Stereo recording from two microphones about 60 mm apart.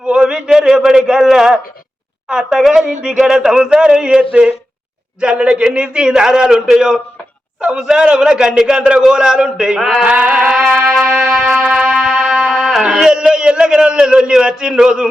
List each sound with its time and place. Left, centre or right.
0.0 s a sound: centre
2.3 s a man's voice: centre
10.0 s music: centre
11.0 s music: right
12.5 s a sound: centre
12.7 s a man's voice: centre